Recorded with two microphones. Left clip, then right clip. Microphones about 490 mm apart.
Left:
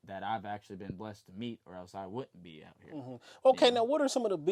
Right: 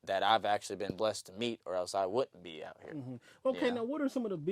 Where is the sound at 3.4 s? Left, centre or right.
Left.